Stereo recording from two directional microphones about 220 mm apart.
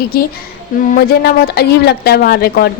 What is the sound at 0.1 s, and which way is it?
A woman's voice, 45° left (ahead or behind).